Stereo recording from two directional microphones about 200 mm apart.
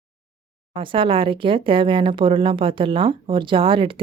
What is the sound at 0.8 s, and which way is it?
Speech, 25° right (ahead or behind).